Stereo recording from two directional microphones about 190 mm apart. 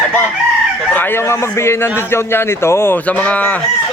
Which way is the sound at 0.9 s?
10° left (ahead or behind).